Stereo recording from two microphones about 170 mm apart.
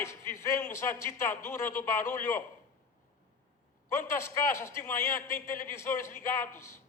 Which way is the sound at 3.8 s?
15° left (ahead or behind).